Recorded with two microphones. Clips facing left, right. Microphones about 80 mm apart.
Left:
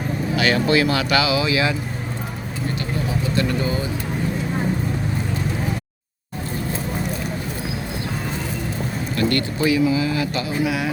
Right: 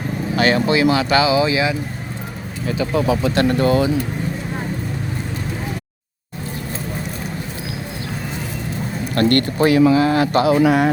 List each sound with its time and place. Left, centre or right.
0.5 s speech: right
2.6 s speech: right
3.6 s speech: right
9.1 s speech: right
10.4 s speech: right